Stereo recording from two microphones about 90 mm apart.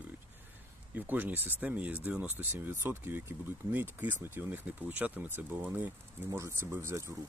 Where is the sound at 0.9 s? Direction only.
20° right (ahead or behind).